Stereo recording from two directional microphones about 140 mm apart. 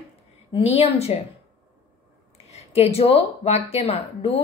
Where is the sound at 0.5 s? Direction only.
45° left (ahead or behind).